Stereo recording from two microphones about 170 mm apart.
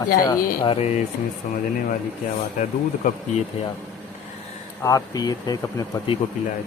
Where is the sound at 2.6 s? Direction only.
50° left (ahead or behind).